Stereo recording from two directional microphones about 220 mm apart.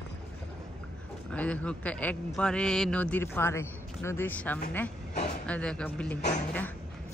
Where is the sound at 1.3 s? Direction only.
5° left (ahead or behind).